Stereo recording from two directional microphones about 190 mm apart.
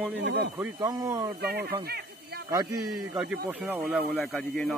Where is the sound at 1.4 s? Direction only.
55° right (ahead or behind).